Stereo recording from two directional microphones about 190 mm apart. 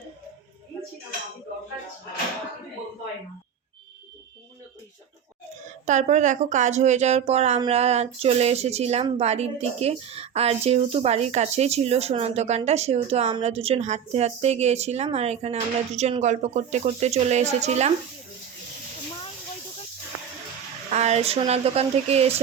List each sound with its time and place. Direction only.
5.8 s a woman's voice: 40° right (ahead or behind)
20.9 s a woman's voice: 35° right (ahead or behind)